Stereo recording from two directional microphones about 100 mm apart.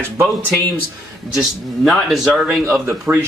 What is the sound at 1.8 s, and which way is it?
Speech, centre (ahead or behind).